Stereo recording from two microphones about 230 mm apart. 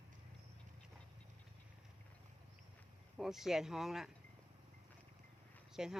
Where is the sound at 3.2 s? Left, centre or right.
Centre.